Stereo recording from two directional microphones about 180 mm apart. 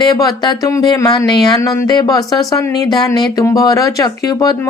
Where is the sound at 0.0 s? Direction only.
20° left (ahead or behind).